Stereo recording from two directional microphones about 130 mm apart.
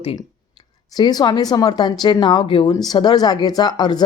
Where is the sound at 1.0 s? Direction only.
30° left (ahead or behind).